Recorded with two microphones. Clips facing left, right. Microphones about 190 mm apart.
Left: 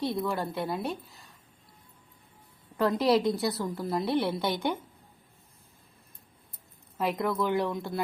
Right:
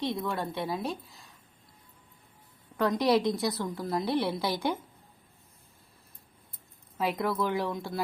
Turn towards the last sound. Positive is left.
turn(degrees=0)  # may be behind; listen again after turning